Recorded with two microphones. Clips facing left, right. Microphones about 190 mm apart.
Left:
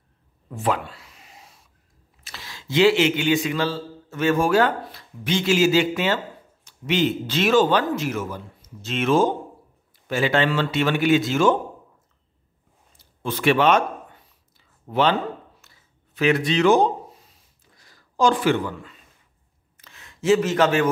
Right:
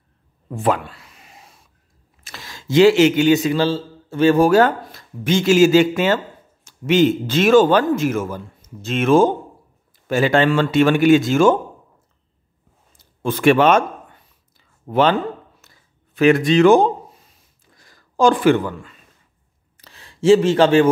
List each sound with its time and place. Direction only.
0.6 s a man's voice: 50° right (ahead or behind)
13.2 s a man's voice: 50° right (ahead or behind)
14.9 s a man's voice: 50° right (ahead or behind)
15.6 s a sound: 45° right (ahead or behind)
16.2 s a man's voice: 50° right (ahead or behind)
17.7 s a sound: 50° right (ahead or behind)
19.8 s speech: 35° right (ahead or behind)